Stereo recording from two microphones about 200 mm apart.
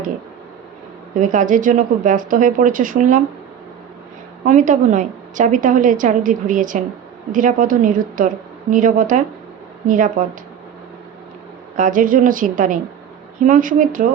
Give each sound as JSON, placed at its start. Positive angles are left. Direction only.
{"t": 1.1, "sound": "a woman's voice", "side_deg": -40}
{"t": 4.4, "sound": "a woman's voice", "side_deg": -40}
{"t": 11.8, "sound": "a woman's voice", "side_deg": -45}